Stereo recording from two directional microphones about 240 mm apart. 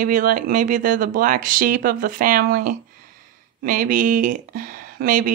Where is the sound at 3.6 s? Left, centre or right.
Right.